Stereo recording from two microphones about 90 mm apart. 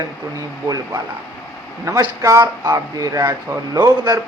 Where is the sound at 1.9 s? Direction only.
40° right (ahead or behind).